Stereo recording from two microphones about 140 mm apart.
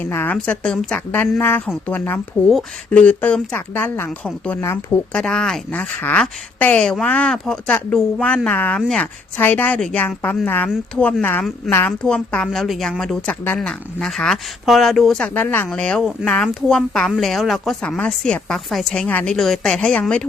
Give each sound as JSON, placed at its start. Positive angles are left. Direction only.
{"t": 0.1, "sound": "a woman's voice", "side_deg": 15}
{"t": 2.5, "sound": "speech", "side_deg": 0}
{"t": 3.0, "sound": "a woman's voice", "side_deg": 10}
{"t": 5.1, "sound": "a woman's voice", "side_deg": 5}
{"t": 9.4, "sound": "a woman's voice", "side_deg": 15}
{"t": 15.2, "sound": "a woman's voice", "side_deg": 10}